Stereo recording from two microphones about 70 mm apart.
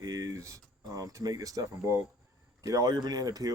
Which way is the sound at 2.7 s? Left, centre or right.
Right.